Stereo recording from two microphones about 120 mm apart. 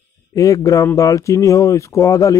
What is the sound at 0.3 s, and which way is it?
Speech, 25° left (ahead or behind).